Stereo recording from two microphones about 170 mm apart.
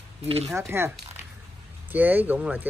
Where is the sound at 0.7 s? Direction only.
15° right (ahead or behind).